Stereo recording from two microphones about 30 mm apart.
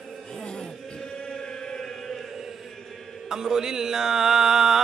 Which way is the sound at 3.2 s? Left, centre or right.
Centre.